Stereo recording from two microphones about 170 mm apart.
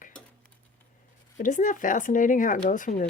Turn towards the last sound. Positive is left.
turn(degrees=50)  # may be behind; listen again after turning